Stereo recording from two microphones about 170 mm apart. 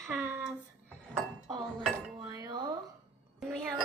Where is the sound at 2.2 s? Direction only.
20° right (ahead or behind).